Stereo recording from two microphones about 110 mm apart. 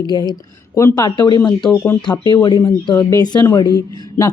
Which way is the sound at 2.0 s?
40° left (ahead or behind).